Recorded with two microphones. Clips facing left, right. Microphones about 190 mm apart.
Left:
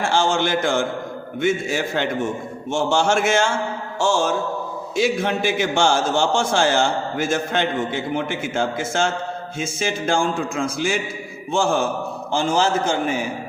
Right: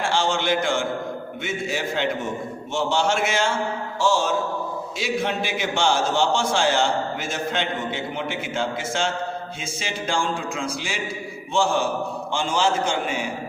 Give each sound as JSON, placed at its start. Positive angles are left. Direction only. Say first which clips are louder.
{"t": 0.0, "sound": "a sound", "louder": "left 3 dB", "side_deg": 45}
{"t": 1.4, "sound": "a man's voice", "louder": "left 8 dB", "side_deg": 50}
{"t": 4.9, "sound": "a man's voice", "louder": "left 6 dB", "side_deg": 45}